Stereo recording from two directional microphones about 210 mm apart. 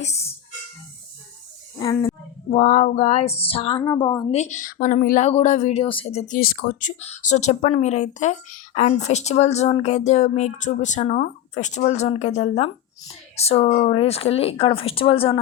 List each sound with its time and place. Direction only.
0.0 s speech: 30° left (ahead or behind)
1.8 s speech: 20° left (ahead or behind)
2.5 s a woman's voice: 35° left (ahead or behind)